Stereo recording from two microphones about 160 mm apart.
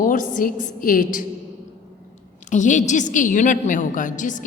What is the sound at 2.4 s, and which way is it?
A woman's voice, 50° left (ahead or behind).